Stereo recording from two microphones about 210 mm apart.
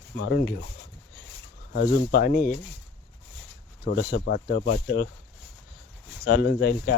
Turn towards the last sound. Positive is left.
turn(degrees=50)  # may be behind; listen again after turning